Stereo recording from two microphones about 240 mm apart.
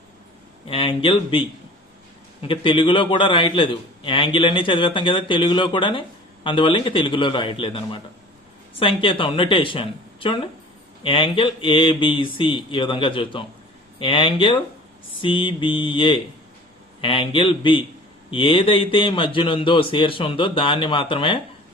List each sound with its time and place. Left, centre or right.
0.7 s a man's voice: left